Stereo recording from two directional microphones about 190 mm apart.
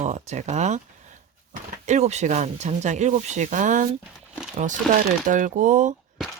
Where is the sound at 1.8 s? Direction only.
35° right (ahead or behind).